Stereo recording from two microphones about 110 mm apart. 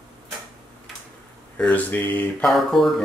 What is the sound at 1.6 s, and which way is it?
Speech, 15° left (ahead or behind).